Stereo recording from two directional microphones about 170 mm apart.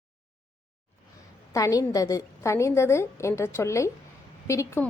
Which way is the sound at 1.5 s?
20° left (ahead or behind).